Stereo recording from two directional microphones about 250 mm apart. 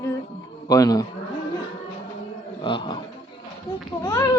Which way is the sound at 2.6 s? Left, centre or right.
Centre.